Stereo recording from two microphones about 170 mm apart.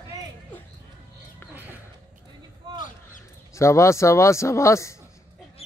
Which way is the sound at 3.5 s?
15° left (ahead or behind).